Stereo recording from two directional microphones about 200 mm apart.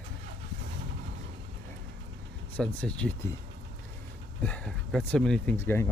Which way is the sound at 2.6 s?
5° left (ahead or behind).